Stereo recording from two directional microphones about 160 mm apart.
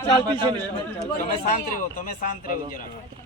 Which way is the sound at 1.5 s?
60° left (ahead or behind).